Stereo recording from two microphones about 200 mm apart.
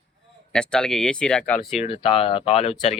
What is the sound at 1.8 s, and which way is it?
Speech, 30° left (ahead or behind).